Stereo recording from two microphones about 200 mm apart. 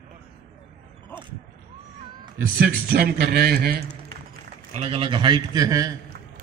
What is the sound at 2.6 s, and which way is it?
A man's voice, 50° right (ahead or behind).